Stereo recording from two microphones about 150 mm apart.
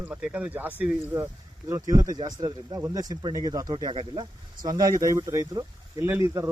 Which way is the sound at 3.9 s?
40° right (ahead or behind).